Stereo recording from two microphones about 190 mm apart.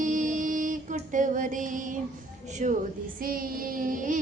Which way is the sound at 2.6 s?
40° right (ahead or behind).